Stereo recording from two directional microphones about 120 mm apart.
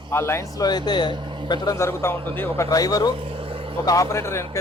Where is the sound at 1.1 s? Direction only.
40° right (ahead or behind).